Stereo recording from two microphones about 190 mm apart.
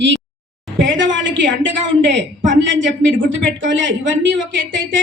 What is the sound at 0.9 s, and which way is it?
A woman's voice, 80° right.